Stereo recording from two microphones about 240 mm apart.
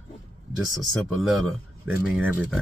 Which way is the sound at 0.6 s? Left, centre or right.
Centre.